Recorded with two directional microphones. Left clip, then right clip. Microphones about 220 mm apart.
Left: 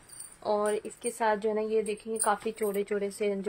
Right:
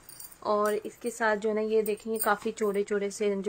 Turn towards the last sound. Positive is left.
turn(degrees=-20)  # may be behind; listen again after turning